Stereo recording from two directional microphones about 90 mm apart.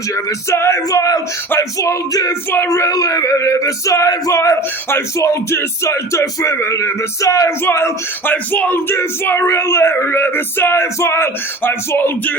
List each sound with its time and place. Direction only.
0.5 s male singing: 30° left (ahead or behind)